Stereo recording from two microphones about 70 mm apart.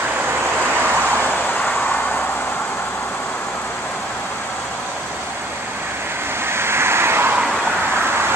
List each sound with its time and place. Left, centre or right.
1.2 s vehicle: left
6.5 s vehicle: right